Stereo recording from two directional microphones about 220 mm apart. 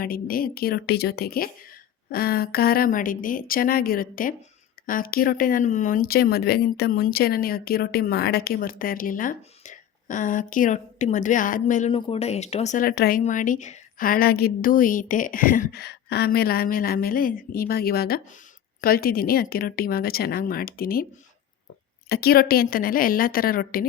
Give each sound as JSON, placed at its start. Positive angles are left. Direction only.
{"t": 0.0, "sound": "speech", "side_deg": 40}
{"t": 22.1, "sound": "speech", "side_deg": 45}